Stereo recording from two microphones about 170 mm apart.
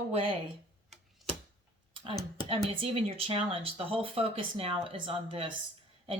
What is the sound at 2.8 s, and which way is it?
Speech, 35° right (ahead or behind).